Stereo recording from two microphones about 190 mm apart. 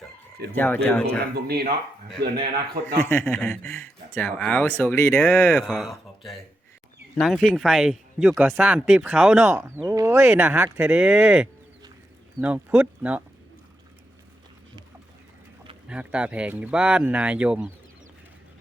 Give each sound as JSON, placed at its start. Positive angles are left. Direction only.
{"t": 0.5, "sound": "speech", "side_deg": 10}
{"t": 1.3, "sound": "speech", "side_deg": -55}
{"t": 3.0, "sound": "speech", "side_deg": 10}
{"t": 5.6, "sound": "speech", "side_deg": 0}
{"t": 15.9, "sound": "speech", "side_deg": -5}